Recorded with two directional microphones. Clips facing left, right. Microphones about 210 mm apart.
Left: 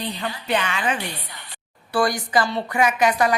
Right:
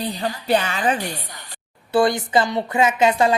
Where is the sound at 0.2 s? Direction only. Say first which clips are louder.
Right 5 dB; 40° right (ahead or behind).